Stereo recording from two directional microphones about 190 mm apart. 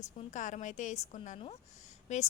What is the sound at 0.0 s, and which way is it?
A woman's voice, 40° left (ahead or behind).